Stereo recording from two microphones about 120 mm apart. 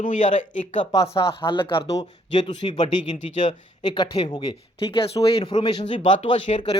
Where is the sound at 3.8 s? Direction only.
35° left (ahead or behind).